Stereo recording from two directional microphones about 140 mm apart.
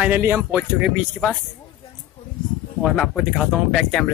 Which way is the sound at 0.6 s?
5° right (ahead or behind).